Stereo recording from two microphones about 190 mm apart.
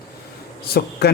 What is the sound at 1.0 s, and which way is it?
Speech, 60° left (ahead or behind).